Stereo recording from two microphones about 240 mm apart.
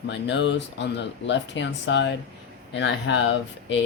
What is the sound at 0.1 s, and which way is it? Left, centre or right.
Speech, left.